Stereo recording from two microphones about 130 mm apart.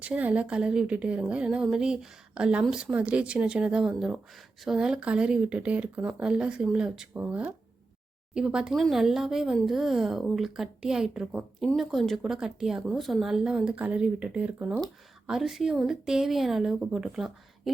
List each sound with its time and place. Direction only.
0.0 s a woman's voice: 10° right (ahead or behind)